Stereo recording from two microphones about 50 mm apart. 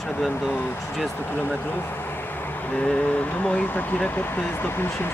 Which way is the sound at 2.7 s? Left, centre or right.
Left.